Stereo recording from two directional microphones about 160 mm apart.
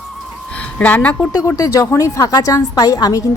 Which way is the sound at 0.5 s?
10° left (ahead or behind).